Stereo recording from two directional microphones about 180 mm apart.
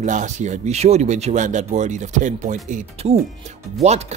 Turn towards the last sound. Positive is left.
turn(degrees=-35)  # may be behind; listen again after turning